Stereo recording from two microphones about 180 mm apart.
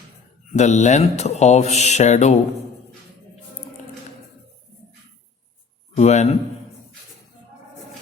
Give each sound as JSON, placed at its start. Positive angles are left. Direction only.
{"t": 0.5, "sound": "speech", "side_deg": 40}
{"t": 6.0, "sound": "speech", "side_deg": 40}